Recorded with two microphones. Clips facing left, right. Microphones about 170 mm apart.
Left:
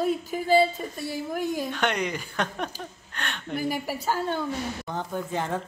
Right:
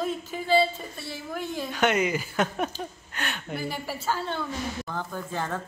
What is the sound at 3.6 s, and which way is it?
A woman's voice, 10° left (ahead or behind).